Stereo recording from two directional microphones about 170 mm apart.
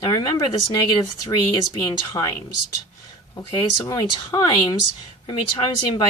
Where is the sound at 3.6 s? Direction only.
20° left (ahead or behind).